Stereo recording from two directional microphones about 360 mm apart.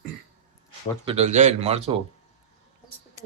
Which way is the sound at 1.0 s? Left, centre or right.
Centre.